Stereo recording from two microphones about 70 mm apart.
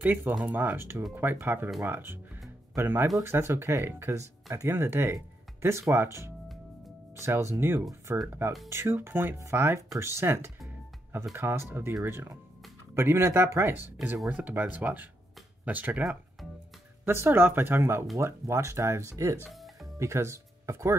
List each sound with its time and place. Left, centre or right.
0.0 s speech: right
0.7 s speech: right
4.6 s speech: right
14.3 s speech: right
16.0 s speech: centre
17.0 s speech: right
19.5 s music: centre
20.0 s speech: right